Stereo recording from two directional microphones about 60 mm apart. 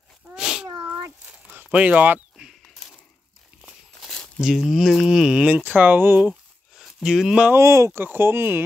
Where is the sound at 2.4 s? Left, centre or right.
Centre.